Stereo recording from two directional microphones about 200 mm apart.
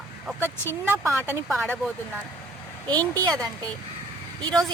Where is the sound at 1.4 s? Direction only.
Centre (ahead or behind).